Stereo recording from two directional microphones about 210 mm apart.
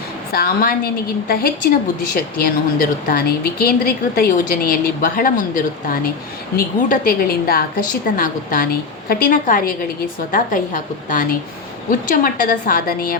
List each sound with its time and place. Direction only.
0.3 s a woman's voice: 45° left (ahead or behind)